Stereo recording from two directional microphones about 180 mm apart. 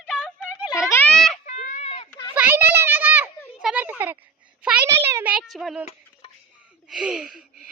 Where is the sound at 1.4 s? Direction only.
45° left (ahead or behind).